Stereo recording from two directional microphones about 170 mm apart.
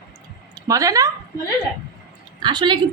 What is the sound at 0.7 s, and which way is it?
Speech, 20° right (ahead or behind).